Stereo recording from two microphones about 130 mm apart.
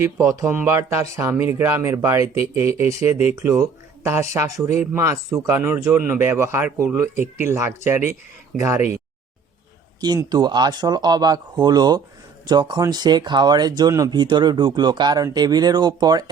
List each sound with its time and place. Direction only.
0.0 s speech: 20° right (ahead or behind)
10.3 s speech: 30° right (ahead or behind)